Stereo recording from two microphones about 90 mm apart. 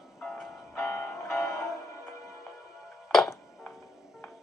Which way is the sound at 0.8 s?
30° left (ahead or behind).